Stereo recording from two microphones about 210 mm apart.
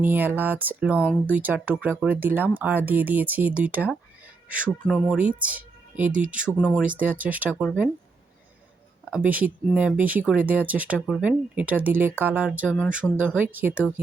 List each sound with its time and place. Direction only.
0.0 s speech: 10° right (ahead or behind)
0.9 s speech: 10° left (ahead or behind)
1.3 s speech: 5° right (ahead or behind)
4.9 s speech: 5° left (ahead or behind)
5.1 s speech: 5° right (ahead or behind)
6.8 s speech: 5° right (ahead or behind)
9.0 s speech: 5° right (ahead or behind)